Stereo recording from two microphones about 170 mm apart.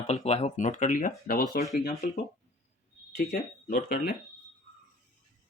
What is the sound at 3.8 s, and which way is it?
Speech, 65° left (ahead or behind).